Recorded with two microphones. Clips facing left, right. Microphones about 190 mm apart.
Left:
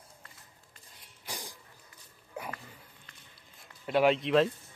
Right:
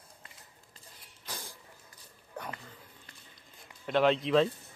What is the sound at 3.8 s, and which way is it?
Speech, 5° left (ahead or behind).